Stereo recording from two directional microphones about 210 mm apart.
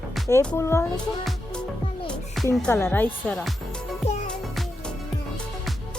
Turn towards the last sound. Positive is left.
turn(degrees=30)  # may be behind; listen again after turning